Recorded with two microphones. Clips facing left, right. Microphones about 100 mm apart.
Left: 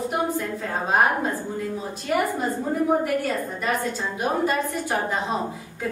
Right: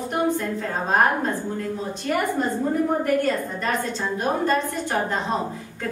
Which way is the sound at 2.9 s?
5° left (ahead or behind).